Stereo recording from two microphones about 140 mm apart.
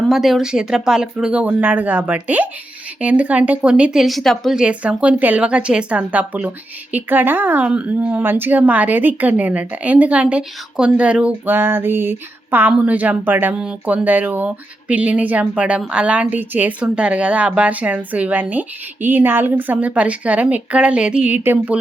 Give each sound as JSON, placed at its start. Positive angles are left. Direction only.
{"t": 0.1, "sound": "a woman's voice", "side_deg": 0}